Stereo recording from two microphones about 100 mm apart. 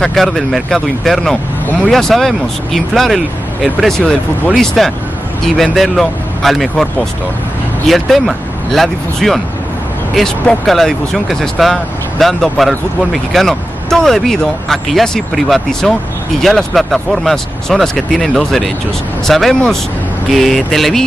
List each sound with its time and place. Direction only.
0.0 s speech: centre (ahead or behind)
7.9 s speech: centre (ahead or behind)